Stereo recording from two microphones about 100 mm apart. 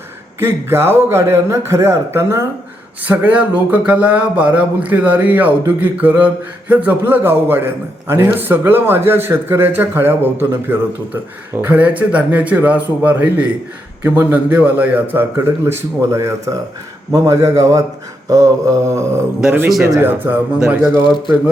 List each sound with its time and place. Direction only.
0.3 s speech: 25° right (ahead or behind)
3.0 s a man's voice: 15° right (ahead or behind); by 16.6 s 30° right (ahead or behind)
17.1 s mantra: 35° right (ahead or behind)
20.0 s speech: 20° right (ahead or behind)